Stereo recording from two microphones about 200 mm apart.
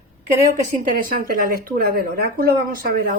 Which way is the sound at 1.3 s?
45° right (ahead or behind).